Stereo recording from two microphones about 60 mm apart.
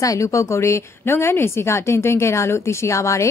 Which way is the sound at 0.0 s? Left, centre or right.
Left.